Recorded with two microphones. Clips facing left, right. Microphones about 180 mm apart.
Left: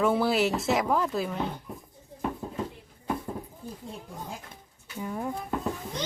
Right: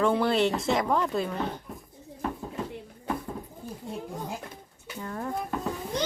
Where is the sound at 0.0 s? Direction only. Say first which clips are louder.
Right 1 dB; 5° left (ahead or behind).